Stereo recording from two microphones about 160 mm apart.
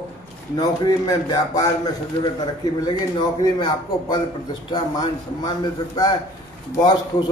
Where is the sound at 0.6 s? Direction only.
25° left (ahead or behind).